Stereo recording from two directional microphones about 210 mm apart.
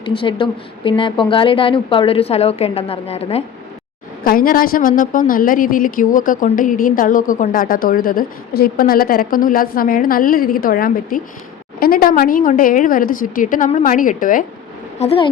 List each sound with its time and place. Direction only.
0.0 s a woman's voice: 25° left (ahead or behind)
4.2 s a woman's voice: 45° left (ahead or behind)
14.9 s a woman's voice: 30° left (ahead or behind)